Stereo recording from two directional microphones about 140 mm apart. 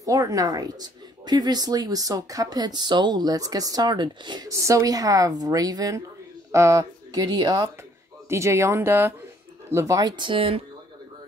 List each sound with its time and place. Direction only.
0.0 s a woman's voice: 25° right (ahead or behind); by 10.6 s 40° right (ahead or behind)